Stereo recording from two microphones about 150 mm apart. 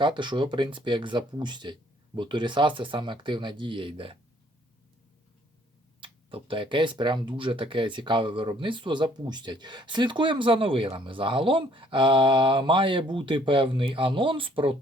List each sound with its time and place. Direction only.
0.0 s speech: 30° right (ahead or behind)
6.0 s speech: 35° right (ahead or behind)